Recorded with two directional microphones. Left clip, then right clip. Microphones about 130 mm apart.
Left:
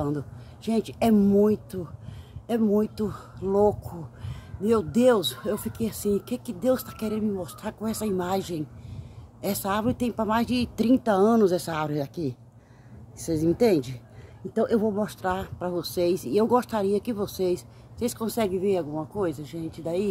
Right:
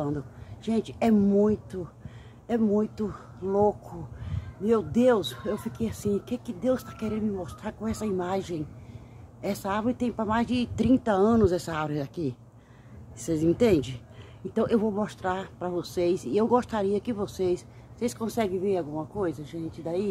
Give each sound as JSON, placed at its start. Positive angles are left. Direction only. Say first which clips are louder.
{"t": 0.7, "sound": "speech", "louder": "left 2 dB", "side_deg": 35}